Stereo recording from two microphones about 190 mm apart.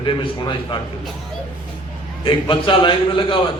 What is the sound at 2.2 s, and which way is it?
A man's voice, 25° left (ahead or behind).